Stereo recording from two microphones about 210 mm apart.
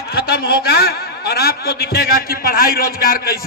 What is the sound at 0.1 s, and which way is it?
A man's voice, 50° left (ahead or behind).